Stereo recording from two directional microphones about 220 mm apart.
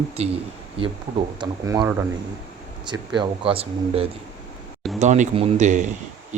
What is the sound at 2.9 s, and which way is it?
Speech, 20° right (ahead or behind).